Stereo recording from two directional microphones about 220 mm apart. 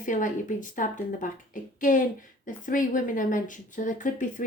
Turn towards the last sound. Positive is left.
turn(degrees=35)  # may be behind; listen again after turning